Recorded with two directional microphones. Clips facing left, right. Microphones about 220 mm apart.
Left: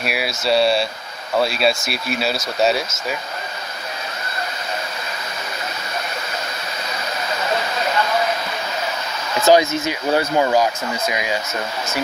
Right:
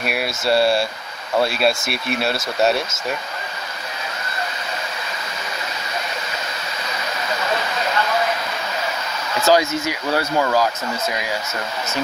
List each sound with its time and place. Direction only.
0.0 s speech: centre (ahead or behind)
9.5 s speech: 20° left (ahead or behind)